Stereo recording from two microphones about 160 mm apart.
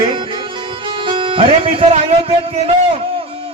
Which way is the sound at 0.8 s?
30° right (ahead or behind).